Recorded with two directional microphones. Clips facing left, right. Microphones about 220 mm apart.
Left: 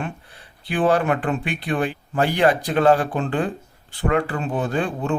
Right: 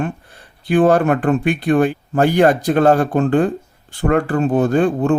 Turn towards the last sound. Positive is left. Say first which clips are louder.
# right 8 dB
turn(degrees=-45)  # may be behind; listen again after turning